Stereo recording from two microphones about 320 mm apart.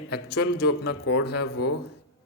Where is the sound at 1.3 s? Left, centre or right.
Left.